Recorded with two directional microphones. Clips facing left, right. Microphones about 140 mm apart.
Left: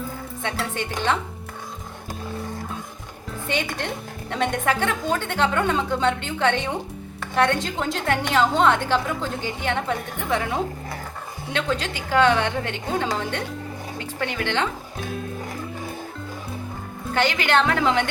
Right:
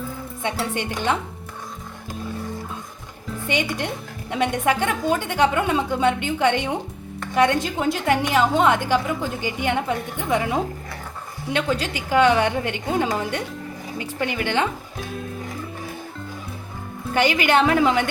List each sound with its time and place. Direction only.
0.4 s a woman's voice: 15° right (ahead or behind)
3.5 s a woman's voice: 15° right (ahead or behind)
11.5 s a woman's voice: 10° right (ahead or behind)
17.2 s a woman's voice: 10° right (ahead or behind)